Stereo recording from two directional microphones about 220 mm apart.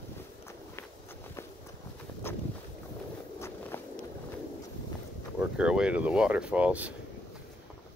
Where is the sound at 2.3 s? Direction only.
10° left (ahead or behind).